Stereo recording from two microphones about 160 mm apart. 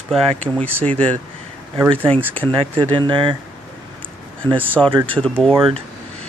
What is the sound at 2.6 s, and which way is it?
Speech, 30° right (ahead or behind).